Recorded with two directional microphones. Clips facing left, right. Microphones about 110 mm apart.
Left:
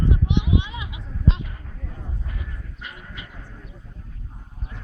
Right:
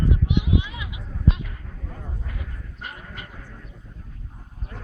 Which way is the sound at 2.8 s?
45° right (ahead or behind).